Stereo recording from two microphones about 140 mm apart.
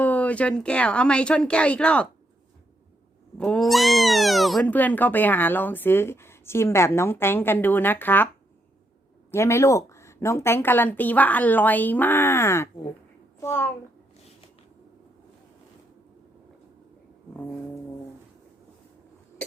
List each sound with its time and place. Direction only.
0.0 s speech: 10° left (ahead or behind)
3.3 s speech: 5° left (ahead or behind)
4.6 s speech: 10° left (ahead or behind)
9.3 s a child's voice: 20° left (ahead or behind)